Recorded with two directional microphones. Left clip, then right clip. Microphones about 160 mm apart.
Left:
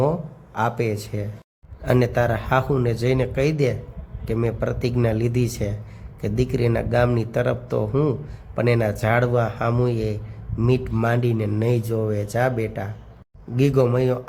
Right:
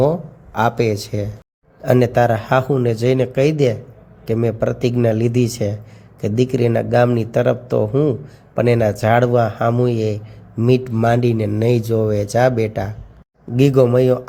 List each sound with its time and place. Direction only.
0.0 s a man's voice: 20° right (ahead or behind)